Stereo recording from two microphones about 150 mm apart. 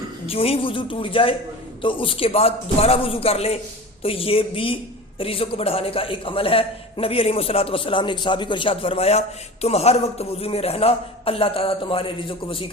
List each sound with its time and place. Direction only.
0.3 s a man's voice: 40° left (ahead or behind)